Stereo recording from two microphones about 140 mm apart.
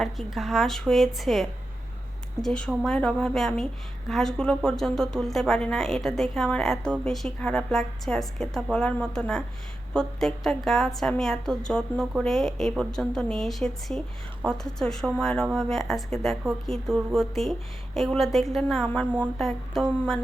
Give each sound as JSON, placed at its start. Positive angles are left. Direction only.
{"t": 0.0, "sound": "speech", "side_deg": 0}